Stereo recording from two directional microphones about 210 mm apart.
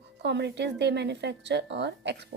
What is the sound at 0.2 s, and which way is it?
A woman's voice, 55° right (ahead or behind).